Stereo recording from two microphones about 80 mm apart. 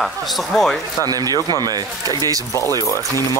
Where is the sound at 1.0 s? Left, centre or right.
Right.